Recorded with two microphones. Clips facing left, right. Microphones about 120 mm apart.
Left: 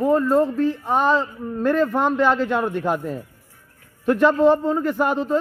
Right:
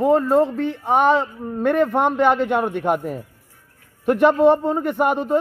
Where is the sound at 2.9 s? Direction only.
15° right (ahead or behind).